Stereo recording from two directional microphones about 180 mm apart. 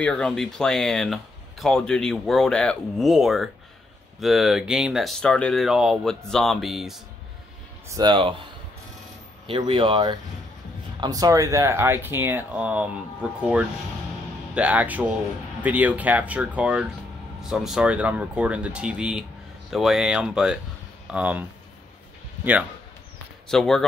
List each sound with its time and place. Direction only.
0.0 s speech: 5° left (ahead or behind)
7.9 s speech: 25° right (ahead or behind)
9.5 s speech: 30° right (ahead or behind); by 22.7 s 10° right (ahead or behind)
23.5 s speech: centre (ahead or behind)